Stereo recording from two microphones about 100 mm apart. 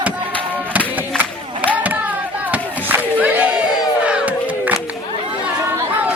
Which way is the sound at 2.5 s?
15° right (ahead or behind).